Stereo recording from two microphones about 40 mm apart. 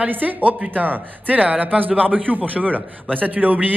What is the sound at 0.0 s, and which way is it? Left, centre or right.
Speech, right.